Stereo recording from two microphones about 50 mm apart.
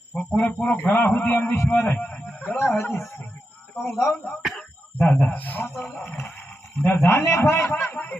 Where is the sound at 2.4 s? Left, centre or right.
Left.